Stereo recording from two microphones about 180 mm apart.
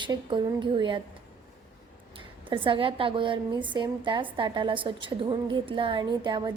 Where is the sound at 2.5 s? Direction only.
30° right (ahead or behind).